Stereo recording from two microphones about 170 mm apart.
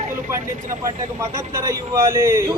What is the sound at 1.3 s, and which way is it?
A man's voice, 20° right (ahead or behind).